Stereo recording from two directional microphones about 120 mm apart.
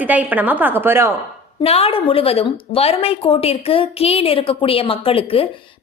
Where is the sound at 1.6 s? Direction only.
55° left (ahead or behind).